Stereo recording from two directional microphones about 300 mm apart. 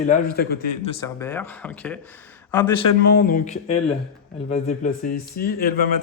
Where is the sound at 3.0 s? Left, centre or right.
Left.